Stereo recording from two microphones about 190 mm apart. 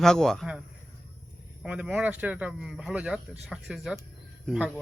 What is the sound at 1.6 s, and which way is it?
Speech, 5° right (ahead or behind).